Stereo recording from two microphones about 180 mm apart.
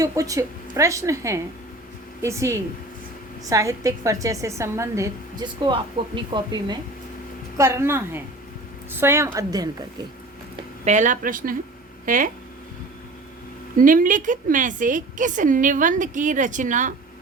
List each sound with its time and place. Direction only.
0.0 s a woman's voice: 20° right (ahead or behind)
7.5 s speech: 15° right (ahead or behind)
10.8 s a woman's voice: 45° right (ahead or behind)
13.8 s a woman's voice: 50° right (ahead or behind)